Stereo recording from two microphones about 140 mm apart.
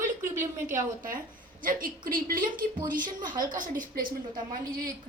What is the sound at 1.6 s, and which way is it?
A woman's voice, 85° right.